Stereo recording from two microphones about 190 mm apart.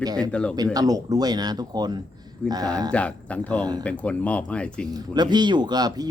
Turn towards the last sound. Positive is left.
turn(degrees=-20)  # may be behind; listen again after turning